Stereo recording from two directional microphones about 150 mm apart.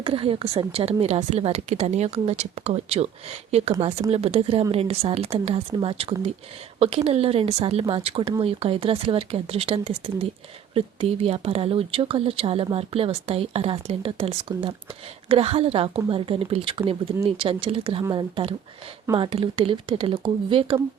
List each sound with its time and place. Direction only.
0.0 s a woman's voice: 35° right (ahead or behind)